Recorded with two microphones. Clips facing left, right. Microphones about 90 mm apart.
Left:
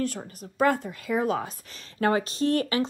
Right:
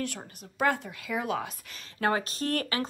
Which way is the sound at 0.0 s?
35° left (ahead or behind).